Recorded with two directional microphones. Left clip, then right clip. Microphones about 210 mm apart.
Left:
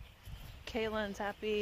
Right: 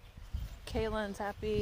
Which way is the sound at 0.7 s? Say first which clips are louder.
Right 1 dB; 10° right (ahead or behind).